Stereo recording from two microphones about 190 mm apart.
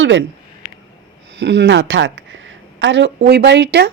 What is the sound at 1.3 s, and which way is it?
Speech, 65° right (ahead or behind).